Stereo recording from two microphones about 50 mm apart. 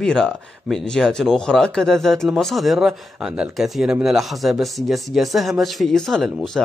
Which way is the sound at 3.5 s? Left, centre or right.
Centre.